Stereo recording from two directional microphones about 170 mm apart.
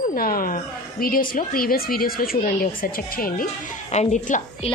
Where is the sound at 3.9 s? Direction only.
45° left (ahead or behind).